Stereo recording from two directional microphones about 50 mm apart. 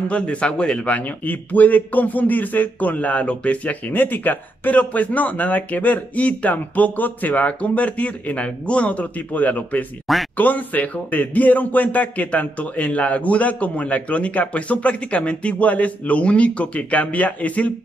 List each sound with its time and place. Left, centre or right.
0.1 s speech: left
3.9 s speech: left